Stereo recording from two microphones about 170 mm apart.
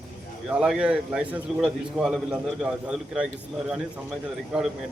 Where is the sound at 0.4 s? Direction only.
5° right (ahead or behind).